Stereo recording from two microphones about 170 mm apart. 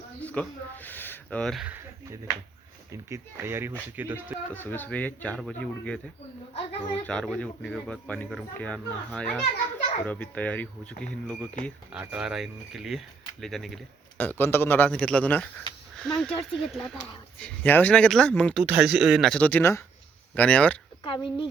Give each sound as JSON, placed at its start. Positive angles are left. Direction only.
{"t": 0.2, "sound": "speech", "side_deg": 10}
{"t": 1.6, "sound": "speech", "side_deg": -10}
{"t": 4.5, "sound": "speech", "side_deg": 10}
{"t": 6.5, "sound": "speech", "side_deg": 40}
{"t": 7.0, "sound": "speech", "side_deg": 5}
{"t": 11.9, "sound": "speech", "side_deg": -5}
{"t": 14.2, "sound": "speech", "side_deg": 10}
{"t": 18.6, "sound": "speech", "side_deg": -5}
{"t": 21.0, "sound": "speech", "side_deg": 30}